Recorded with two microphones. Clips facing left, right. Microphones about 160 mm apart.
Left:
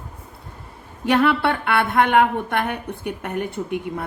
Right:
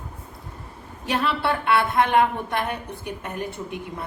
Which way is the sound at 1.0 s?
60° left (ahead or behind).